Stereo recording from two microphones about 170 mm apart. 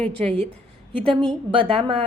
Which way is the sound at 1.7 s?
30° right (ahead or behind).